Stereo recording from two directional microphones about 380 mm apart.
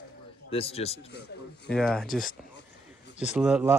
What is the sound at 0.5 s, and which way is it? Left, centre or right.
Speech, centre.